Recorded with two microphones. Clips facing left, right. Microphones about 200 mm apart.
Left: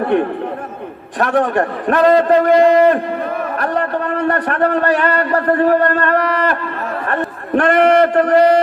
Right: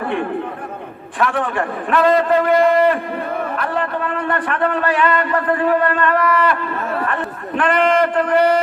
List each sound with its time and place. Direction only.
1.2 s a man's voice: 40° left (ahead or behind)